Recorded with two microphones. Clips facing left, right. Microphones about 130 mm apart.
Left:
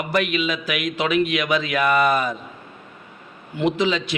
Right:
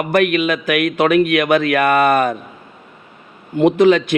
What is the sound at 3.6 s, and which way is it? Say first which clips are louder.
Speech: right 9 dB; 55° right (ahead or behind).